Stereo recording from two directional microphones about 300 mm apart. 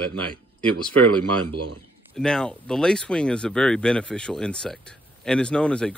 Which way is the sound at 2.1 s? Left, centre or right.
Centre.